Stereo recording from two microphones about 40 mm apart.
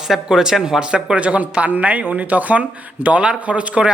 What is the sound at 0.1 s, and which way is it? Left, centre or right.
Speech, centre.